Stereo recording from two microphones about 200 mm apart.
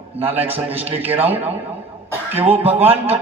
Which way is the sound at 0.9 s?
10° right (ahead or behind).